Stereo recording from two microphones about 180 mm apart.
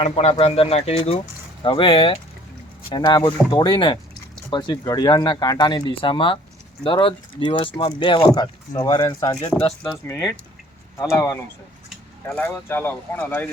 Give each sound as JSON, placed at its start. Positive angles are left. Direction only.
{"t": 0.0, "sound": "speech", "side_deg": 35}